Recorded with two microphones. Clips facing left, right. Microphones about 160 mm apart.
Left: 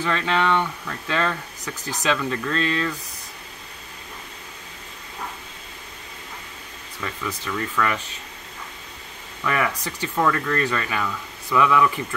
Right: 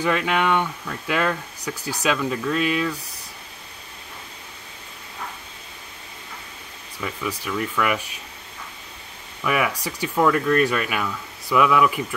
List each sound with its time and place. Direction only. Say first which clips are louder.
0.0 s speech: right 1 dB; 15° right (ahead or behind)
7.0 s speech: right 2 dB; 10° right (ahead or behind)
9.4 s speech: right 1 dB; 10° right (ahead or behind)